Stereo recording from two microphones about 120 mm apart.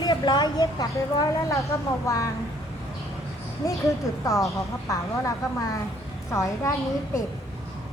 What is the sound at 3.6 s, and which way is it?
Speech, 25° left (ahead or behind).